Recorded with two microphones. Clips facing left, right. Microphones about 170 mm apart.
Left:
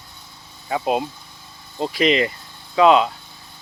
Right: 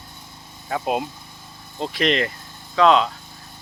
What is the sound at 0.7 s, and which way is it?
Speech, centre (ahead or behind).